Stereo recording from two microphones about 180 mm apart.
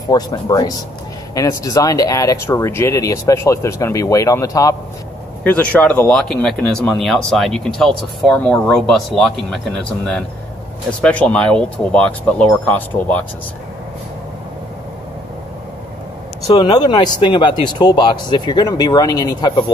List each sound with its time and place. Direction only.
0.1 s speech: 20° left (ahead or behind)
5.4 s speech: 5° left (ahead or behind)
10.9 s speech: 5° left (ahead or behind)
16.4 s speech: 25° left (ahead or behind)